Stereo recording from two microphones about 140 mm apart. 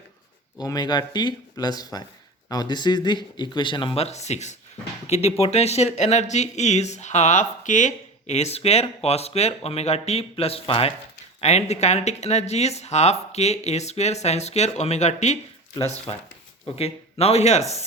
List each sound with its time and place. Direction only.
0.6 s speech: 30° left (ahead or behind); by 17.6 s 50° left (ahead or behind)